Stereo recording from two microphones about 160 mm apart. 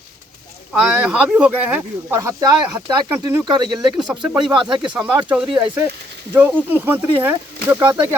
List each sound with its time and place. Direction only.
0.7 s speech: 5° right (ahead or behind); by 4.0 s 25° right (ahead or behind)
4.4 s speech: 5° right (ahead or behind)